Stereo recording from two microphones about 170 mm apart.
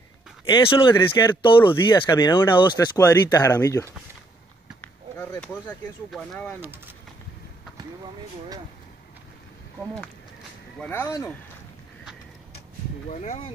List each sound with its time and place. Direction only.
0.5 s speech: 30° left (ahead or behind)
0.9 s speech: 15° left (ahead or behind)
1.4 s speech: 30° left (ahead or behind); by 6.5 s 5° left (ahead or behind)
10.8 s speech: 15° left (ahead or behind)
13.1 s speech: 40° left (ahead or behind)